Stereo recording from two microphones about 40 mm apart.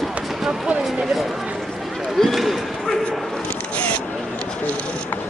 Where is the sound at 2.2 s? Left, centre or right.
Centre.